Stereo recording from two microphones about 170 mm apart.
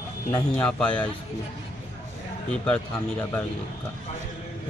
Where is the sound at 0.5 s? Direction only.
5° left (ahead or behind).